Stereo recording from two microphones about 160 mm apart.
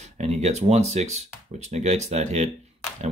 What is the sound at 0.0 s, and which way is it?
Speech, 45° right (ahead or behind).